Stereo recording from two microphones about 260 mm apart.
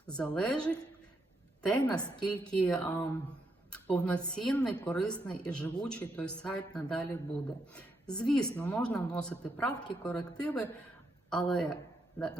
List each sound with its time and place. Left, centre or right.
0.1 s speech: centre